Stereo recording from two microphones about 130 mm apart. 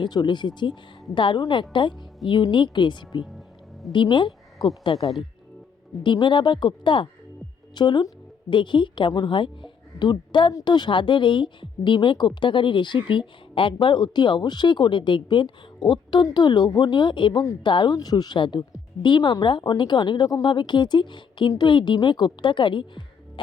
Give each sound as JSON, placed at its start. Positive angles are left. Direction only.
{"t": 0.0, "sound": "a woman's voice", "side_deg": 35}
{"t": 17.4, "sound": "a woman's voice", "side_deg": 25}
{"t": 17.7, "sound": "a woman's voice", "side_deg": 35}